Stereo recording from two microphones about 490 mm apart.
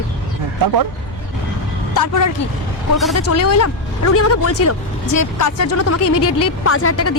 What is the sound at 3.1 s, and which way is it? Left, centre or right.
Speech, left.